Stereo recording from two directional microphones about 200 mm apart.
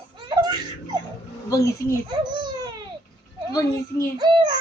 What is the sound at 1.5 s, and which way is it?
Speech, 15° left (ahead or behind).